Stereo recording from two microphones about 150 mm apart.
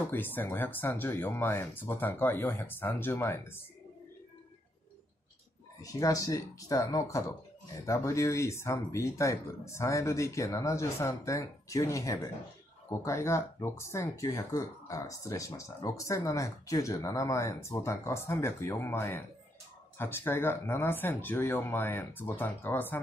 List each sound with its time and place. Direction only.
0.1 s speech: 15° left (ahead or behind)
5.8 s speech: 25° left (ahead or behind)